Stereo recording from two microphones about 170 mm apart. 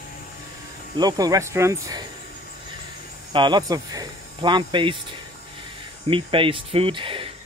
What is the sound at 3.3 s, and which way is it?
Speech, 25° right (ahead or behind).